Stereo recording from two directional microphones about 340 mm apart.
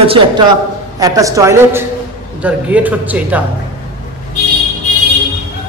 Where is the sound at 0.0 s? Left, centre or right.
Centre.